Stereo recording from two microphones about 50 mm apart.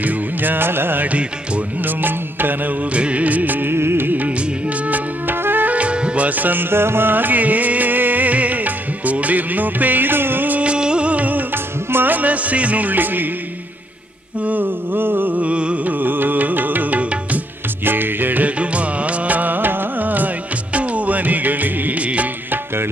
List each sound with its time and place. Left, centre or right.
0.0 s music: right
2.9 s music: right
3.7 s music: right
5.8 s music: right
10.6 s music: right
14.4 s music: right
16.0 s music: right
18.6 s music: right